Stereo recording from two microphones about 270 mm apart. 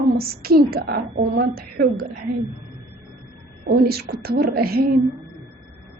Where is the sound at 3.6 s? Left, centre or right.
Right.